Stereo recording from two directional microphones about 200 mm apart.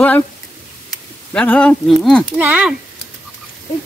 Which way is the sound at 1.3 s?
5° left (ahead or behind).